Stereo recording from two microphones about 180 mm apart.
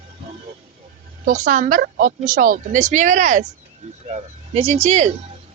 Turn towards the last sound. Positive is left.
turn(degrees=-40)  # may be behind; listen again after turning